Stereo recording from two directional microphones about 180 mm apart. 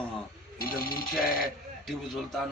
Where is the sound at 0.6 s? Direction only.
55° left (ahead or behind).